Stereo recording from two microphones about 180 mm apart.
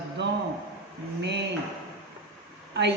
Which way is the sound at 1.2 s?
75° right (ahead or behind).